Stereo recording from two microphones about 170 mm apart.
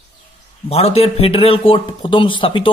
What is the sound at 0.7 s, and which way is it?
Speech, 35° left (ahead or behind).